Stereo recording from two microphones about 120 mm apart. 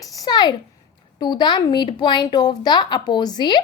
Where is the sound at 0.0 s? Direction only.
35° left (ahead or behind).